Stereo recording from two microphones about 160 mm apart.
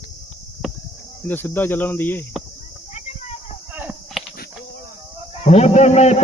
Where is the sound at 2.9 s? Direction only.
45° left (ahead or behind).